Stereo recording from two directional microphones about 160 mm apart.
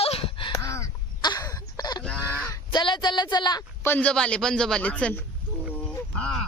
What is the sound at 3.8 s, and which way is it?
A man's voice, 10° left (ahead or behind).